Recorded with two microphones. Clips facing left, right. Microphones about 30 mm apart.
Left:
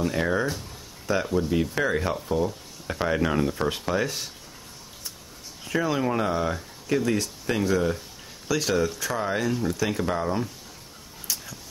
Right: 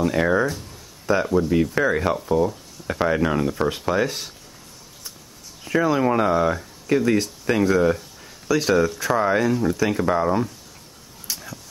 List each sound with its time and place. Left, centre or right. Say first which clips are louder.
0.0 s speech: right 5 dB; centre
5.7 s speech: right 6 dB; centre
9.0 s speech: right 7 dB; right
9.4 s speech: right 5 dB; centre